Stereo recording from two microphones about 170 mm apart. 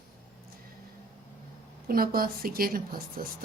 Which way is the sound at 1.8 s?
60° right (ahead or behind).